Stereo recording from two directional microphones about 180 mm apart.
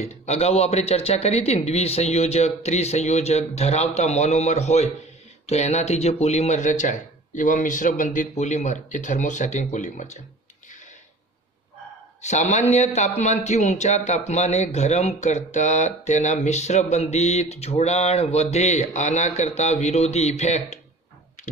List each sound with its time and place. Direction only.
0.0 s a man's voice: 35° left (ahead or behind)
12.2 s a man's voice: 40° left (ahead or behind)